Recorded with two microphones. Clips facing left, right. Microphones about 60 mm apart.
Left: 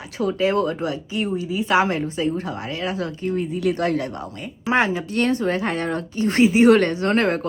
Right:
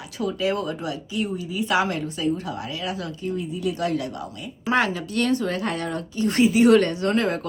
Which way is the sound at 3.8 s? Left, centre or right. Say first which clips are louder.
Left 3 dB; left.